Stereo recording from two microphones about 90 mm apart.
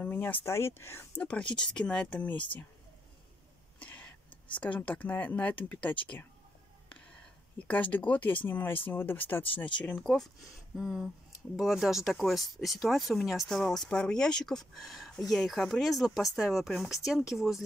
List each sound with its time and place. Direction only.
0.0 s speech: 20° left (ahead or behind)
1.2 s speech: 10° left (ahead or behind)
3.8 s a sound: 20° left (ahead or behind)
4.6 s speech: 15° left (ahead or behind)
7.5 s speech: 15° left (ahead or behind)
9.8 s speech: 10° left (ahead or behind)
10.8 s speech: 5° right (ahead or behind)